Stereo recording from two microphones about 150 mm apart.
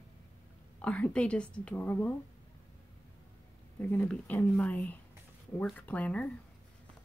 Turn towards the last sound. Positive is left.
turn(degrees=10)  # may be behind; listen again after turning